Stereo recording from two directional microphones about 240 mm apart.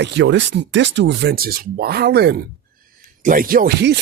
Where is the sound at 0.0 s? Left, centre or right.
Right.